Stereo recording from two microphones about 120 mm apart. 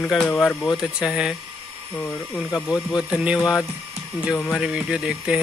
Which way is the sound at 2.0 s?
10° left (ahead or behind).